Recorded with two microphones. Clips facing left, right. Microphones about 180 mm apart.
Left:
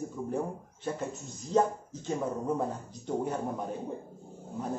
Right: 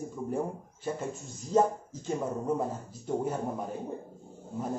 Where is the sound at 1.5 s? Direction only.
5° right (ahead or behind).